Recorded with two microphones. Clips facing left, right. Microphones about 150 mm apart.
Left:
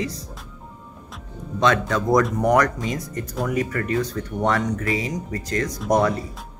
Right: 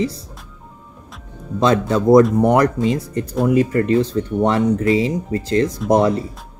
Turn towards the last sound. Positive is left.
turn(degrees=-30)  # may be behind; listen again after turning